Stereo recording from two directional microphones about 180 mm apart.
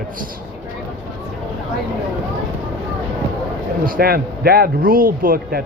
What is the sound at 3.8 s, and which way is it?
Speech, 55° right (ahead or behind).